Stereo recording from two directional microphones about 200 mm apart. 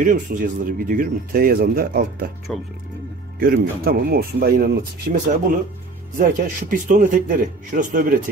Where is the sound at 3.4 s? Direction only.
45° right (ahead or behind).